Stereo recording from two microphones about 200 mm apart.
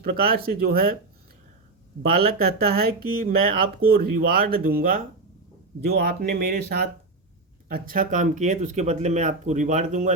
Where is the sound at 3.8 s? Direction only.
50° right (ahead or behind).